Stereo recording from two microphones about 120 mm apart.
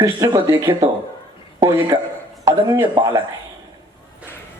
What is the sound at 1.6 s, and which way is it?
A man's voice, 25° right (ahead or behind).